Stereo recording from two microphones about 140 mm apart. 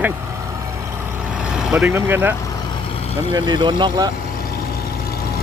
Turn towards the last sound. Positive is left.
turn(degrees=-30)  # may be behind; listen again after turning